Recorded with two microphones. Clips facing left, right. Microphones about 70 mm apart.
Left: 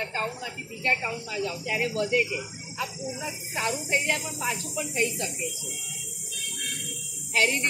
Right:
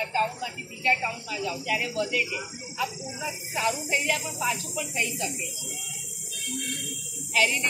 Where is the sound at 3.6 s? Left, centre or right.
Left.